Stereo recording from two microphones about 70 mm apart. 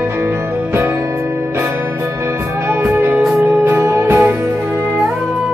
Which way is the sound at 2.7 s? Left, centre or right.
Right.